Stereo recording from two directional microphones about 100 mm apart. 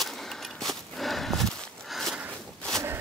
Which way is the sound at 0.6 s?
Centre (ahead or behind).